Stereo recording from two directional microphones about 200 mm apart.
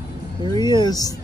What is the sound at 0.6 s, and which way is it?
Speech, 20° left (ahead or behind).